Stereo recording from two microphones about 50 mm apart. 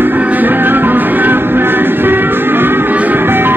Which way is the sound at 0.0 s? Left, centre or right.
Right.